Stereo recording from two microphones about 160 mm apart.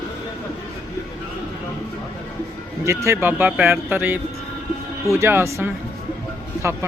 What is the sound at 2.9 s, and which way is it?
Speech, 15° right (ahead or behind).